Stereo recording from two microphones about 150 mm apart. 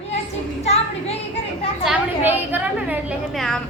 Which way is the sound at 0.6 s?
45° left (ahead or behind).